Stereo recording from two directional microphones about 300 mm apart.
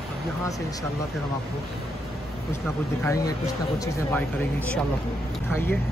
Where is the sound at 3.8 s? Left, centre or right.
Centre.